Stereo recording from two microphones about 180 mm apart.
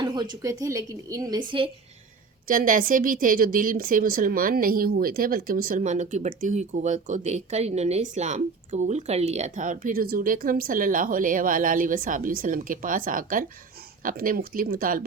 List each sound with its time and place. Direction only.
0.0 s a woman's voice: 25° right (ahead or behind)
2.5 s a woman's voice: 50° right (ahead or behind)